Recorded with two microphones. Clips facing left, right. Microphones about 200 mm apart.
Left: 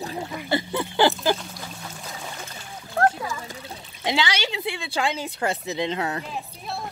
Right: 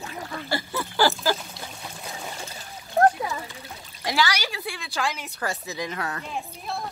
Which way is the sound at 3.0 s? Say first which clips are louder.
Right 2 dB; 20° right (ahead or behind).